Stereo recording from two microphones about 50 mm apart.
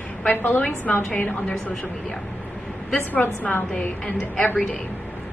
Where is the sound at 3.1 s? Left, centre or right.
Left.